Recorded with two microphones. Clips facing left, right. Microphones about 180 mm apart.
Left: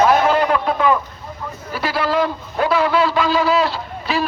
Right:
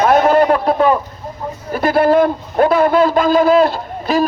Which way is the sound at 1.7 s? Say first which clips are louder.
Right 8 dB; 50° right (ahead or behind).